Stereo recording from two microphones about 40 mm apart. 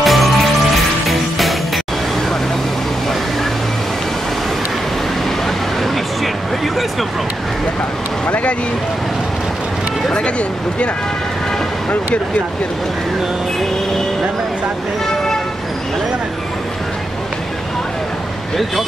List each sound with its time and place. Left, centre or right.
0.0 s music: centre
5.8 s a sound: centre
8.3 s vehicle: left